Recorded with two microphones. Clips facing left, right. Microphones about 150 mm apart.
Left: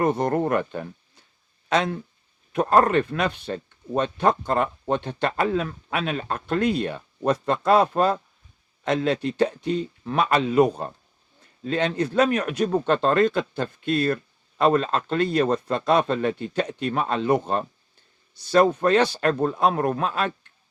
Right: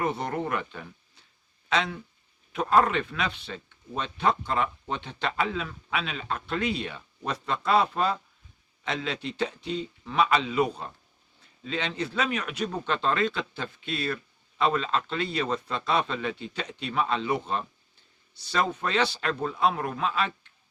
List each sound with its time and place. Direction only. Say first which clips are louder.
0.0 s a man's voice: left 7 dB; 45° left (ahead or behind)